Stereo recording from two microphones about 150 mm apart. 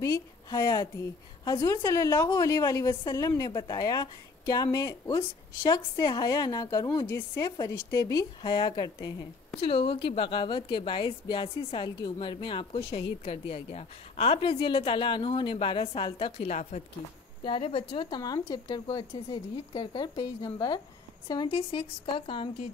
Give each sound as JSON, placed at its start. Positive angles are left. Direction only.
{"t": 0.0, "sound": "a woman's voice", "side_deg": 25}